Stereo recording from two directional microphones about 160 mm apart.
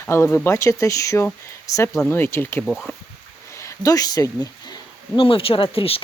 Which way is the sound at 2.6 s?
Centre (ahead or behind).